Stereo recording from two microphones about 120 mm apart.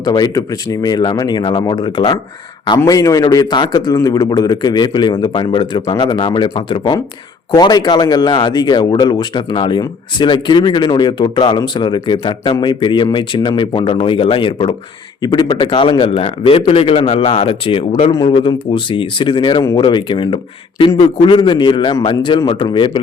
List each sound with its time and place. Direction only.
0.0 s a man's voice: 35° left (ahead or behind)